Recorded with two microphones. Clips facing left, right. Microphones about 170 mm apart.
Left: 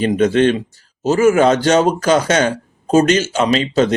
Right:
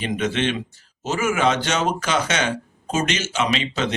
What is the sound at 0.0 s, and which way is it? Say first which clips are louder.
Speech: left 10 dB; 40° left (ahead or behind).